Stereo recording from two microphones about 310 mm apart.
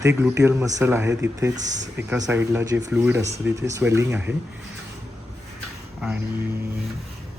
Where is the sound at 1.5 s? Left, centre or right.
Right.